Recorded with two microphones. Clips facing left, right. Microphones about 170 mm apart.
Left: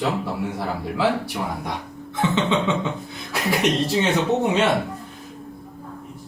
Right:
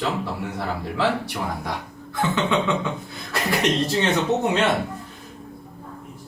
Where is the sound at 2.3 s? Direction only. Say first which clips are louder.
Even; 20° left (ahead or behind).